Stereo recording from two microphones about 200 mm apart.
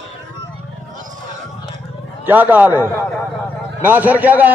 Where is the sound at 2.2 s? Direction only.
10° right (ahead or behind).